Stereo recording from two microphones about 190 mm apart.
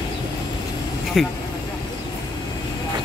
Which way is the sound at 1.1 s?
Centre (ahead or behind).